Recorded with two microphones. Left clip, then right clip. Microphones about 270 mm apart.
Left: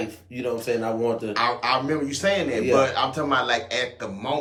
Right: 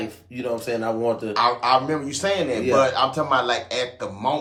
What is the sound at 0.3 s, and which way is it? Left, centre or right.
Speech, centre.